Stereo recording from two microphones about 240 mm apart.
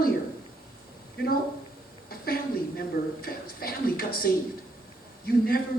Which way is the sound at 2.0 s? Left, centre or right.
Left.